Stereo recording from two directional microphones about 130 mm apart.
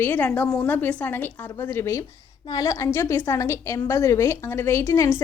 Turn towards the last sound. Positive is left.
turn(degrees=20)  # may be behind; listen again after turning